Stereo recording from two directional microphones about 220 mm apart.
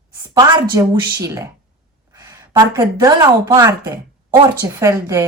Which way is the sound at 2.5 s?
10° right (ahead or behind).